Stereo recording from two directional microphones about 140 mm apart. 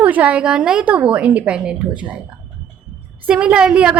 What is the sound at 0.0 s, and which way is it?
A woman's voice, 10° right (ahead or behind).